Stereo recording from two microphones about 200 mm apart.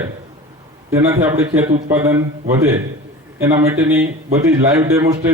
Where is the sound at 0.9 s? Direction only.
15° right (ahead or behind).